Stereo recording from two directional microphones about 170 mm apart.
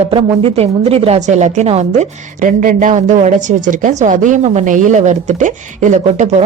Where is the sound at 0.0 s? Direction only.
35° right (ahead or behind).